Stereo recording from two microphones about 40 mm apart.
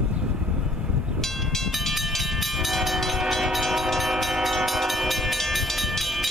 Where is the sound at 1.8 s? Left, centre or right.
Centre.